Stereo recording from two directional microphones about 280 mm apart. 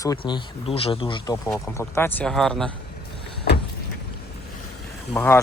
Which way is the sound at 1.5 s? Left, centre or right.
Centre.